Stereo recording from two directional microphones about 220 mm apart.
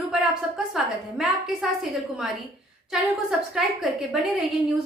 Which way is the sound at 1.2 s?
Centre (ahead or behind).